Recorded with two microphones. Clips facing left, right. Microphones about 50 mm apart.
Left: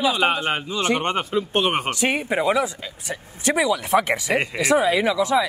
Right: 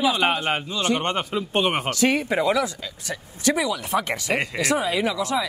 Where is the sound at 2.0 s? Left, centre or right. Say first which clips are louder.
Right 2 dB; left.